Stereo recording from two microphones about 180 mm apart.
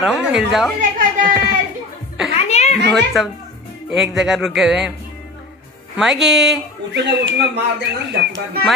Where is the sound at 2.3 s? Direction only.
35° left (ahead or behind).